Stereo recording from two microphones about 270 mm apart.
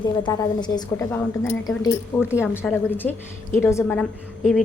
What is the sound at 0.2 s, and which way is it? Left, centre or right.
A woman's voice, centre.